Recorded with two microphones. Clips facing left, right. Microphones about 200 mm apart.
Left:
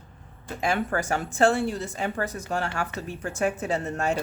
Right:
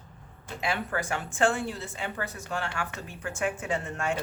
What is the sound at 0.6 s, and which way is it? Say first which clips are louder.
A woman's voice: left 5 dB; 45° left (ahead or behind).